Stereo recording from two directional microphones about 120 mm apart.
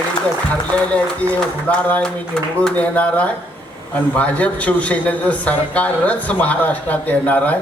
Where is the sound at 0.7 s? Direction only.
10° left (ahead or behind).